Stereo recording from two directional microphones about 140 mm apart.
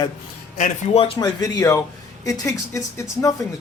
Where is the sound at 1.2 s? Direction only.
25° left (ahead or behind).